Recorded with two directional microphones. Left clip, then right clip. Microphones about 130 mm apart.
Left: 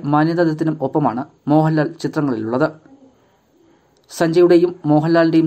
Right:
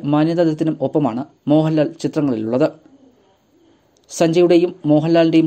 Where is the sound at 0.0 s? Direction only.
25° right (ahead or behind).